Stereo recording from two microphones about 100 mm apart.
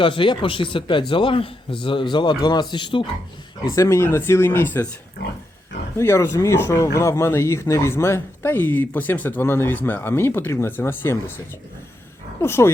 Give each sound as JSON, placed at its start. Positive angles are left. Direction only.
{"t": 0.0, "sound": "speech", "side_deg": 55}
{"t": 3.6, "sound": "speech", "side_deg": 30}
{"t": 6.0, "sound": "speech", "side_deg": 30}
{"t": 12.4, "sound": "speech", "side_deg": 25}